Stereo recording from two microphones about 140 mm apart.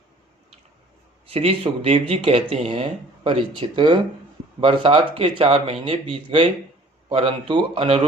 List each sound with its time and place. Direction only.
1.3 s speech: 45° right (ahead or behind)